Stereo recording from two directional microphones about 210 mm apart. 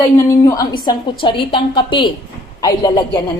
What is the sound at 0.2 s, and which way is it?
A woman's voice, 15° left (ahead or behind).